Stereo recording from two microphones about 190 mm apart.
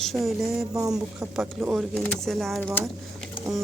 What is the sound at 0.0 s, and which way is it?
Speech, centre (ahead or behind).